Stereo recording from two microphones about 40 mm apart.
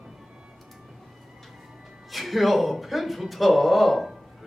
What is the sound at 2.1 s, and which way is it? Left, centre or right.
Speech, centre.